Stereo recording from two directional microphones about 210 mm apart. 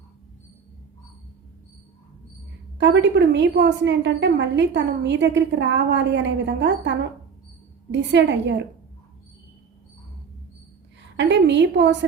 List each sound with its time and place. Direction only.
2.7 s a woman's voice: 55° right (ahead or behind)
11.2 s a woman's voice: 55° right (ahead or behind)